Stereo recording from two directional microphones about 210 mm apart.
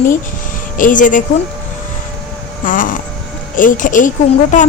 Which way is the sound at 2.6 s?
40° left (ahead or behind).